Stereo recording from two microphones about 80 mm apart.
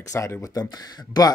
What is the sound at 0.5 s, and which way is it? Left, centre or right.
Speech, left.